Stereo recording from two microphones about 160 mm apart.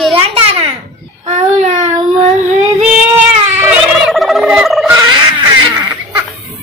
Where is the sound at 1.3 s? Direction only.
45° right (ahead or behind).